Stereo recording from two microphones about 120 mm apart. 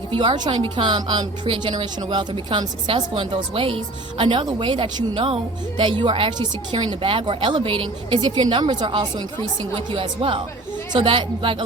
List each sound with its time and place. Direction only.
0.1 s a woman's voice: 40° right (ahead or behind)